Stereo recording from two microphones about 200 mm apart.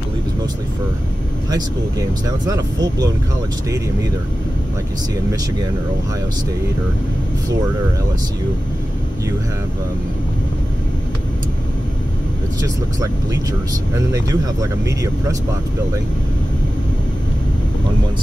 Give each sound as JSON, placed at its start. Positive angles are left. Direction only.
{"t": 1.5, "sound": "speech", "side_deg": -20}
{"t": 12.6, "sound": "speech", "side_deg": -15}